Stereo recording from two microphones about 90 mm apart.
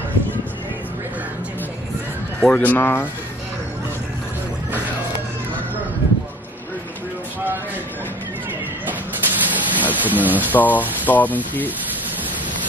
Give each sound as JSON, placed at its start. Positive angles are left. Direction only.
{"t": 2.5, "sound": "speech", "side_deg": 20}
{"t": 8.8, "sound": "a sound", "side_deg": -20}
{"t": 10.5, "sound": "speech", "side_deg": 20}